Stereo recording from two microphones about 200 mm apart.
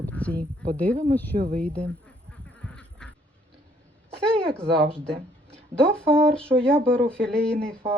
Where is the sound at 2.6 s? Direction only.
5° left (ahead or behind).